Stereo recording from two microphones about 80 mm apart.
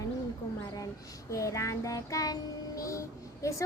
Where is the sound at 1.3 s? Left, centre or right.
Left.